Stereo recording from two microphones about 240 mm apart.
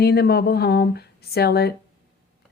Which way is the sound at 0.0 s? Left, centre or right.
Left.